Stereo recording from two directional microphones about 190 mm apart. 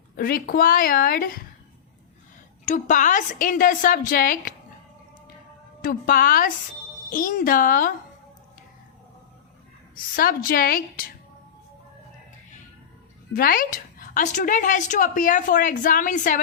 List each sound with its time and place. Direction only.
0.2 s a woman's voice: 50° left (ahead or behind)
2.6 s a woman's voice: 40° left (ahead or behind)
5.8 s a woman's voice: 50° left (ahead or behind)
9.9 s a woman's voice: 50° left (ahead or behind)
13.3 s a woman's voice: 50° left (ahead or behind)